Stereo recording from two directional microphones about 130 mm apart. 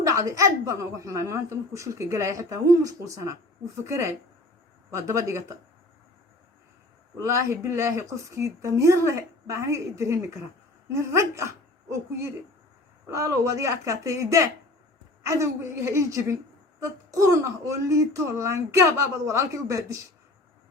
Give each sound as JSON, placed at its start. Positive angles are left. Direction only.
{"t": 0.0, "sound": "a woman's voice", "side_deg": -25}
{"t": 7.3, "sound": "a woman's voice", "side_deg": -20}